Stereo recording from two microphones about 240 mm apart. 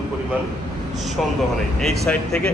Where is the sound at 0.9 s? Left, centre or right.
Centre.